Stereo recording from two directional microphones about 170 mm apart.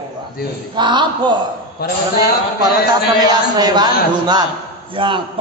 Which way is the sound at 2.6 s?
25° right (ahead or behind).